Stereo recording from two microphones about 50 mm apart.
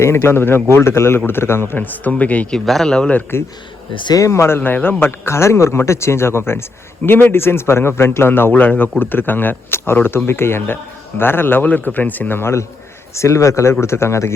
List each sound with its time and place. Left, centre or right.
0.0 s a man's voice: left
1.8 s speech: left
2.6 s speech: centre
3.3 s a man's voice: left
4.6 s speech: left
11.6 s speech: left
12.4 s a man's voice: left
13.1 s speech: left
13.8 s a man's voice: left